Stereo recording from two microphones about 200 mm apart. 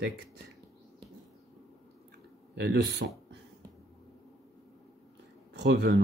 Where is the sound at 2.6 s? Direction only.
55° right (ahead or behind).